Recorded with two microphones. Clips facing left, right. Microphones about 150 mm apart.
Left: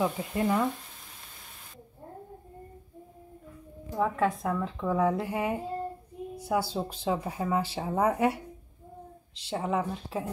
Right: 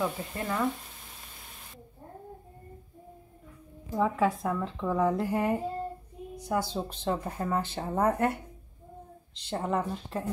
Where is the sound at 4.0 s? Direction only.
Centre (ahead or behind).